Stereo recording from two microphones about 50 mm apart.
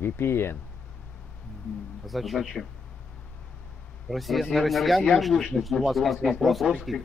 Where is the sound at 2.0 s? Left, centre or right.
Centre.